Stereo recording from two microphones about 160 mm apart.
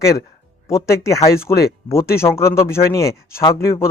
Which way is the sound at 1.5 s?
15° left (ahead or behind).